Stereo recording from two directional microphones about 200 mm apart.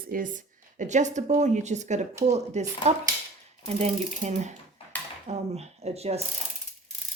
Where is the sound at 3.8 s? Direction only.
35° right (ahead or behind).